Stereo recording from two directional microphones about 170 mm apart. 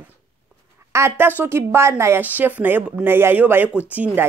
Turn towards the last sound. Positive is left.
turn(degrees=-10)  # may be behind; listen again after turning